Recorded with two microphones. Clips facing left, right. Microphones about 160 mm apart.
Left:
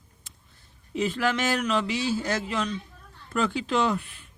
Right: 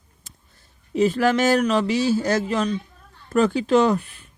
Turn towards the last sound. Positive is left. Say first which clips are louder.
# right 7 dB
turn(degrees=-40)  # may be behind; listen again after turning